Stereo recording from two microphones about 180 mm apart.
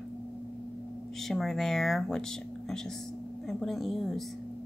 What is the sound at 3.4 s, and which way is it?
Speech, centre (ahead or behind).